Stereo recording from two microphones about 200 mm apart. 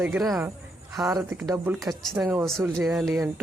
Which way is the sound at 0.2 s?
5° right (ahead or behind).